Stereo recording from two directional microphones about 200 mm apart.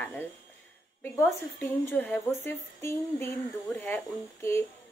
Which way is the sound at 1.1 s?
10° left (ahead or behind).